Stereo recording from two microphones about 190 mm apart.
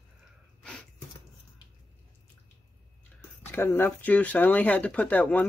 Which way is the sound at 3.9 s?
10° left (ahead or behind).